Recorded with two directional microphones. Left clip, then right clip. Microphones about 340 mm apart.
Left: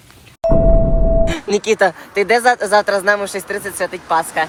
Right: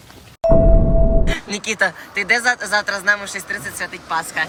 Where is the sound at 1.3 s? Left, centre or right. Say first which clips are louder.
Left 7 dB; centre.